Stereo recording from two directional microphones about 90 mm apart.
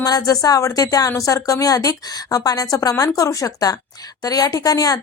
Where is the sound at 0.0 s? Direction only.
40° left (ahead or behind).